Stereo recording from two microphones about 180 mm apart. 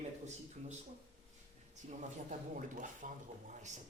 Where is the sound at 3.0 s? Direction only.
45° right (ahead or behind).